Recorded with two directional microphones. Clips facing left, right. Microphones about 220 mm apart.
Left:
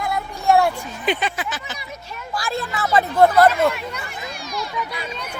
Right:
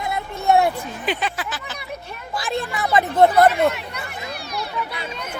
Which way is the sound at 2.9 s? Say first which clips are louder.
Even; 20° right (ahead or behind).